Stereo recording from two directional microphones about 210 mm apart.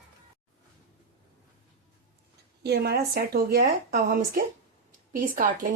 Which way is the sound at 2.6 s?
50° right (ahead or behind).